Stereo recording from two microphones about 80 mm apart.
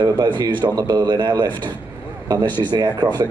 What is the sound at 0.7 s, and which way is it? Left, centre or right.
A man's voice, right.